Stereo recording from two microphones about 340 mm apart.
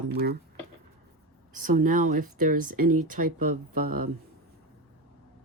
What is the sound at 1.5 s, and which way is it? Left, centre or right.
Speech, right.